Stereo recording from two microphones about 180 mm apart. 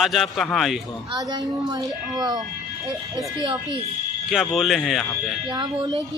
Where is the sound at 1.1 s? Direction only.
20° right (ahead or behind).